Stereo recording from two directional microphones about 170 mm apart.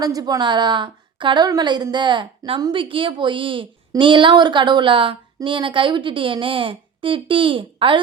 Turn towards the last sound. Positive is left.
turn(degrees=-30)  # may be behind; listen again after turning